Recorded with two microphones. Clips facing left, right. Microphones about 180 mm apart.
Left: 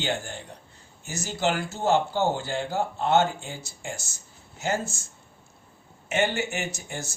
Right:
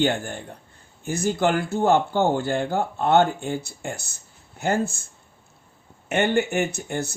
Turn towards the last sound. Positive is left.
turn(degrees=-60)  # may be behind; listen again after turning